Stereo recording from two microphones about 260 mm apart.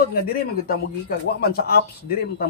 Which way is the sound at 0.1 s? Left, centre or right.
Left.